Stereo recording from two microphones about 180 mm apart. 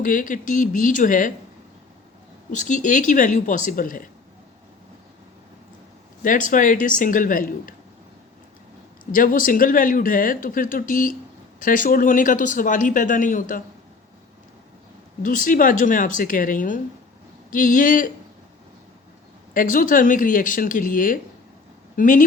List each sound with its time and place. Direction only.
0.0 s speech: 50° left (ahead or behind)
2.5 s speech: 45° left (ahead or behind)
6.2 s speech: 45° left (ahead or behind)
9.1 s speech: 50° left (ahead or behind)
15.2 s speech: 50° left (ahead or behind)
19.5 s speech: 50° left (ahead or behind)